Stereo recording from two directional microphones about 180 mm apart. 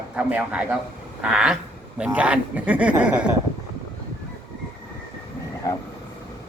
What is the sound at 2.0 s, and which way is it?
Speech, 5° right (ahead or behind).